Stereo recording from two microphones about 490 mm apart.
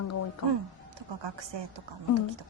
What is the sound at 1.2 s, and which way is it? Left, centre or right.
Speech, right.